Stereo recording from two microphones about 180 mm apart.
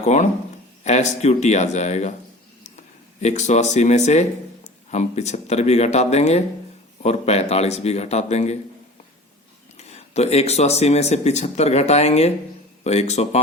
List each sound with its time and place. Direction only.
0.0 s speech: 40° left (ahead or behind)
3.2 s speech: 40° left (ahead or behind)
9.7 s speech: 35° left (ahead or behind)